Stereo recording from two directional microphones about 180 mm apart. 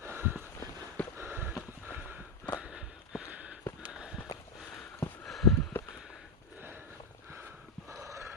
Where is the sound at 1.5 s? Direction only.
5° right (ahead or behind).